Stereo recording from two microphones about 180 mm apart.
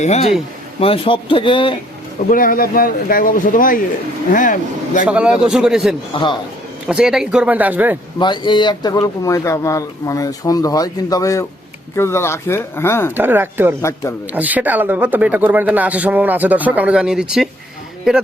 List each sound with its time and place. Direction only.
0.0 s a man's voice: 40° left (ahead or behind)
2.3 s speech: 50° left (ahead or behind)
5.0 s speech: 5° right (ahead or behind)
8.2 s speech: 25° left (ahead or behind)
13.1 s speech: 10° right (ahead or behind)